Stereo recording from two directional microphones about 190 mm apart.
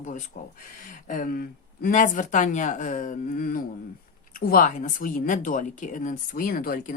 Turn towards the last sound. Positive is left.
turn(degrees=50)  # may be behind; listen again after turning